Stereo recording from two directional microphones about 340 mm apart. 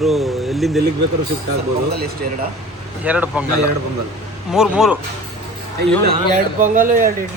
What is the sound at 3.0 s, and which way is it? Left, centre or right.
Speech, centre.